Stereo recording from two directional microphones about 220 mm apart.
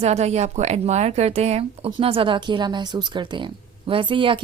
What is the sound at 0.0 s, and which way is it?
A woman's voice, 30° right (ahead or behind).